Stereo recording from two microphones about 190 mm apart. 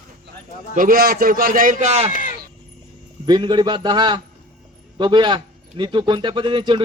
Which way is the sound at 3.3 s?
25° right (ahead or behind).